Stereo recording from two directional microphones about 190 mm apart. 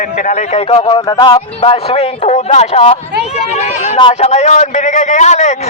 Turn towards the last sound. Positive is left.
turn(degrees=35)  # may be behind; listen again after turning